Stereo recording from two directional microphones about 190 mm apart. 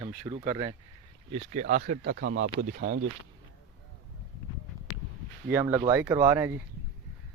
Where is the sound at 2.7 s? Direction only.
45° right (ahead or behind).